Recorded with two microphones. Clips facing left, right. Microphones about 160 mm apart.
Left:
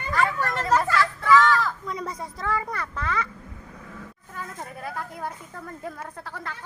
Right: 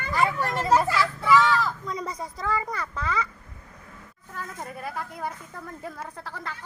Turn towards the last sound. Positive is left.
turn(degrees=0)  # may be behind; listen again after turning